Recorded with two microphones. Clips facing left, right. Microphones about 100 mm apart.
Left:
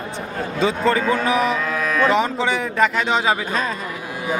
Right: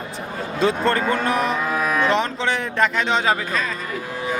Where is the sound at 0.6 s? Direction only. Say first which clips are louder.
Left 1 dB; centre (ahead or behind).